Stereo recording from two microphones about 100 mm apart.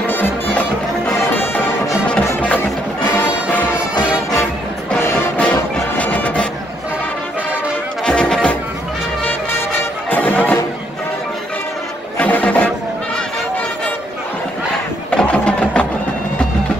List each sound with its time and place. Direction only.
0.0 s music: 20° left (ahead or behind)
5.0 s music: 25° left (ahead or behind)
5.4 s music: 15° left (ahead or behind)
8.0 s music: 10° left (ahead or behind)
9.2 s music: 20° left (ahead or behind)
12.2 s music: 15° left (ahead or behind)
15.0 s sewing machine: 10° left (ahead or behind)